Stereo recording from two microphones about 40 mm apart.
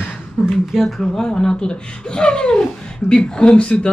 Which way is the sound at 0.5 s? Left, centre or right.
Centre.